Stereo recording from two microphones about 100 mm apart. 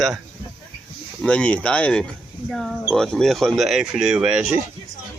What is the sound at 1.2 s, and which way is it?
Speech, 10° left (ahead or behind).